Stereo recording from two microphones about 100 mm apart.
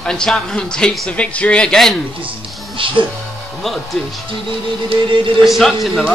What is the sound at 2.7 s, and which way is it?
Speech, 60° right (ahead or behind).